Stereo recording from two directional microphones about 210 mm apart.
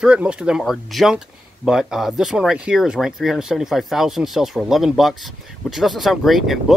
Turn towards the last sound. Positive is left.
turn(degrees=0)  # may be behind; listen again after turning